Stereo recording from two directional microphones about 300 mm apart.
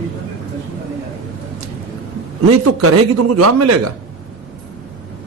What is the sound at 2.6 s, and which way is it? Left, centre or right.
Speech, right.